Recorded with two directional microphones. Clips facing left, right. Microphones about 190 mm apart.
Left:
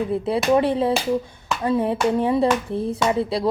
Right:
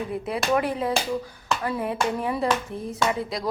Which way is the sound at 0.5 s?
30° left (ahead or behind).